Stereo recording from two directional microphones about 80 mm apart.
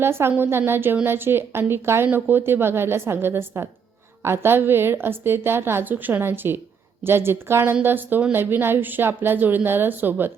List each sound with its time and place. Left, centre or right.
0.0 s a woman's voice: right